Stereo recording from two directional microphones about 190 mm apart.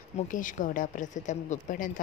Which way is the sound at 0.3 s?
45° left (ahead or behind).